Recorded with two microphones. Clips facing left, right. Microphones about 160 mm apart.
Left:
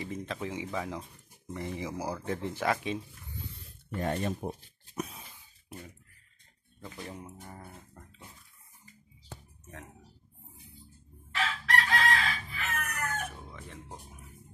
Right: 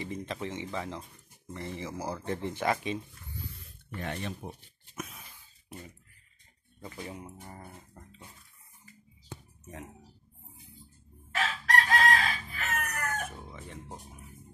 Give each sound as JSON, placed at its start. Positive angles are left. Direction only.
{"t": 0.0, "sound": "speech", "side_deg": 0}
{"t": 3.5, "sound": "rub", "side_deg": 40}
{"t": 4.9, "sound": "a sound", "side_deg": 30}
{"t": 6.8, "sound": "speech", "side_deg": -5}
{"t": 11.3, "sound": "chicken", "side_deg": -45}
{"t": 13.5, "sound": "music", "side_deg": 0}